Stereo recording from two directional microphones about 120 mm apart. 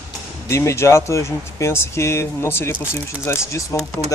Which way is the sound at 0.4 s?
25° left (ahead or behind).